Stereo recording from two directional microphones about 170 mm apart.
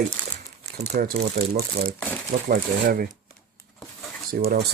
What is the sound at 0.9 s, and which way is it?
Speech, 55° right (ahead or behind).